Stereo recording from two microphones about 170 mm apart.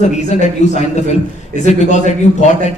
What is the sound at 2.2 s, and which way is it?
Speech, 45° left (ahead or behind).